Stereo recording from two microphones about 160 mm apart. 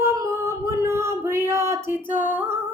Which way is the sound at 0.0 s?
20° right (ahead or behind).